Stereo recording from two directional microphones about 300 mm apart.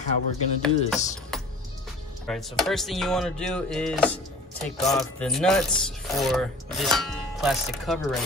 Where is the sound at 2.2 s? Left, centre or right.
Centre.